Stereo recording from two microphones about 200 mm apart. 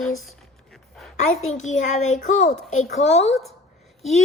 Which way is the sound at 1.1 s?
35° left (ahead or behind).